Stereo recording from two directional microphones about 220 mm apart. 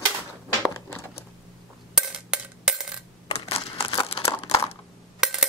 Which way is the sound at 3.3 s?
25° left (ahead or behind).